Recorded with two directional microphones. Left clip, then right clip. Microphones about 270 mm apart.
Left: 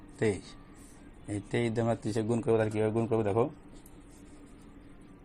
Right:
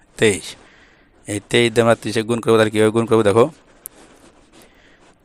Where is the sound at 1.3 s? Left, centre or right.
Right.